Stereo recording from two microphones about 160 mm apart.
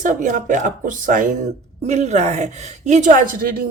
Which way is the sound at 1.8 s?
45° right (ahead or behind).